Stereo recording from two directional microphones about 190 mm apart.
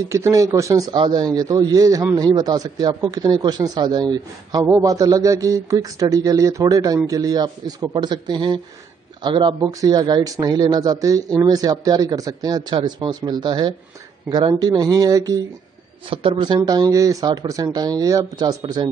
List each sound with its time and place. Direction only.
0.1 s a man's voice: 15° right (ahead or behind)